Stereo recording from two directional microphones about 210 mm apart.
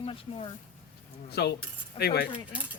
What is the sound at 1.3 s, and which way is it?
Speech, 50° left (ahead or behind).